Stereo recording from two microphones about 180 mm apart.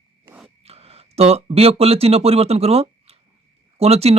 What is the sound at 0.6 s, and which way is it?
Speech, 35° right (ahead or behind).